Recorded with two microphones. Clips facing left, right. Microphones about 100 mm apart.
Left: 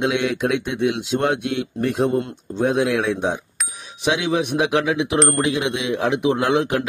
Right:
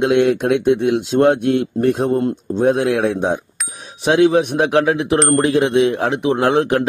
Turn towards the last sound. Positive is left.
turn(degrees=-35)  # may be behind; listen again after turning